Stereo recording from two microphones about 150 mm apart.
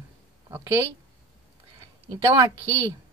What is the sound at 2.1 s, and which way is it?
Speech, 20° right (ahead or behind).